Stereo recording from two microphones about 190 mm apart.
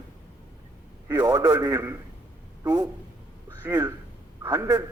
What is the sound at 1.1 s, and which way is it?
A man's voice, 15° right (ahead or behind).